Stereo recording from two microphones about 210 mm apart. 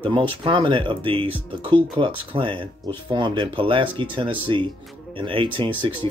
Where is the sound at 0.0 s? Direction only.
25° right (ahead or behind).